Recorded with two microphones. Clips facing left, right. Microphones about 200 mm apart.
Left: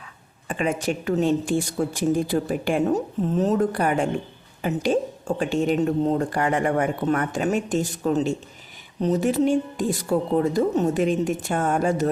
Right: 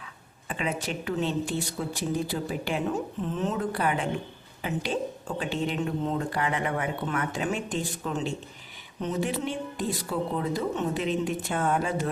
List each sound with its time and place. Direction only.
0.4 s a woman's voice: 45° left (ahead or behind)